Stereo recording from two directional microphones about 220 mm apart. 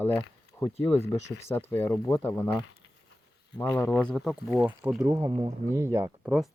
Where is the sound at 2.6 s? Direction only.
55° left (ahead or behind).